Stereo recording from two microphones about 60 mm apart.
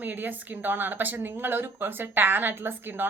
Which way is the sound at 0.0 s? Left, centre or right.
Right.